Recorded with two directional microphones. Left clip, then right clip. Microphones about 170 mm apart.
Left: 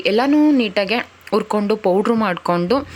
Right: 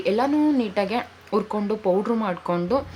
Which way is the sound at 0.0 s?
30° left (ahead or behind).